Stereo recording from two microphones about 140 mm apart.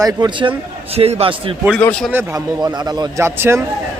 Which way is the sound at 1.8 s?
10° left (ahead or behind).